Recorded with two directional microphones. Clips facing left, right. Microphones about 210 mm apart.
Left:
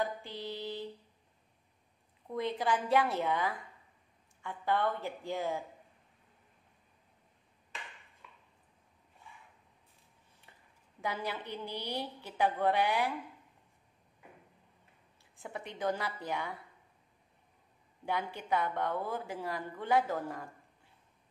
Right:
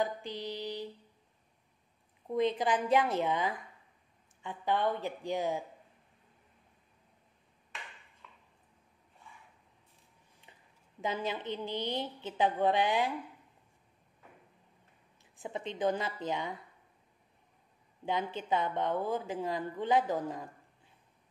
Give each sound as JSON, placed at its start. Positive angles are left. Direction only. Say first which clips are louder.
{"t": 0.0, "sound": "a woman's voice", "louder": "right 2 dB", "side_deg": -15}
{"t": 2.2, "sound": "a woman's voice", "louder": "right 4 dB", "side_deg": -20}
{"t": 8.2, "sound": "a sound", "louder": "right 1 dB", "side_deg": 10}
{"t": 11.0, "sound": "a woman's voice", "louder": "right 3 dB", "side_deg": -20}
{"t": 15.3, "sound": "a woman's voice", "louder": "right 5 dB", "side_deg": -20}
{"t": 18.0, "sound": "a woman's voice", "louder": "right 2 dB", "side_deg": -20}